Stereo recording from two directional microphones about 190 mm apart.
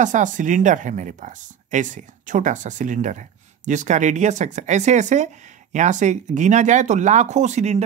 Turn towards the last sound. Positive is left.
turn(degrees=-35)  # may be behind; listen again after turning